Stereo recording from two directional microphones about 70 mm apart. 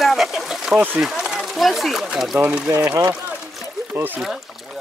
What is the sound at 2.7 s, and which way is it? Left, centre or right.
Speech, right.